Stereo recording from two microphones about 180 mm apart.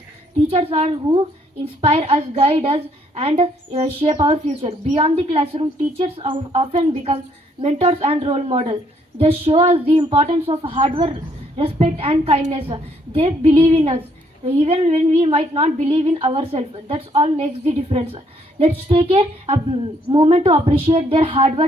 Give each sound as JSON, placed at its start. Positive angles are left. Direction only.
{"t": 0.5, "sound": "a woman's voice", "side_deg": -30}